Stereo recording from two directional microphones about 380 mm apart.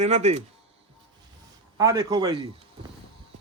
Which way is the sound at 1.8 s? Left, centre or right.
Centre.